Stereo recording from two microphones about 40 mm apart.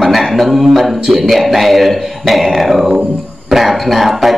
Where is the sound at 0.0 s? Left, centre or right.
Centre.